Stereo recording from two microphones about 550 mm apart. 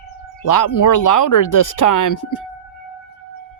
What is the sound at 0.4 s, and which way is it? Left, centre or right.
Speech, left.